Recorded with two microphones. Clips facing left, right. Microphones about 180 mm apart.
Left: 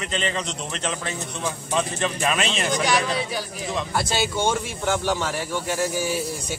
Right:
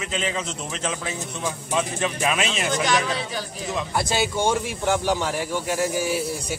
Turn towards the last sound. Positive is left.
turn(degrees=-15)  # may be behind; listen again after turning